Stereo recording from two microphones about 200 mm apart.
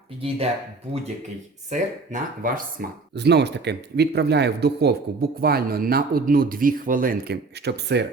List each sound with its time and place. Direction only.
0.2 s speech: 30° right (ahead or behind)
1.7 s speech: 40° right (ahead or behind)
3.2 s speech: 55° right (ahead or behind)